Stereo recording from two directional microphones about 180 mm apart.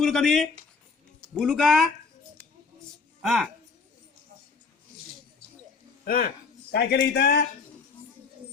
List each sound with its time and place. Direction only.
0.0 s speech: centre (ahead or behind)
3.2 s a woman's voice: centre (ahead or behind)
6.1 s a man's voice: 55° left (ahead or behind)